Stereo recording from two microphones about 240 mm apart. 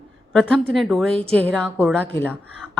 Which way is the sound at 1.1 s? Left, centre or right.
Right.